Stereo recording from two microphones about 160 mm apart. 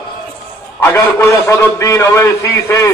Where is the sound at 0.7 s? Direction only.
15° left (ahead or behind).